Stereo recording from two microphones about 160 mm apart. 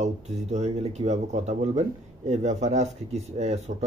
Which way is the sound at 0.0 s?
45° right (ahead or behind).